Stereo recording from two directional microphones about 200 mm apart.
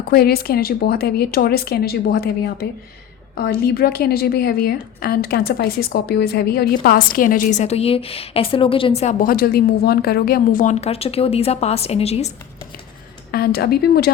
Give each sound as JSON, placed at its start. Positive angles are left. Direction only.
{"t": 0.1, "sound": "a woman's voice", "side_deg": 50}
{"t": 9.2, "sound": "a woman's voice", "side_deg": 50}
{"t": 13.3, "sound": "a woman's voice", "side_deg": 50}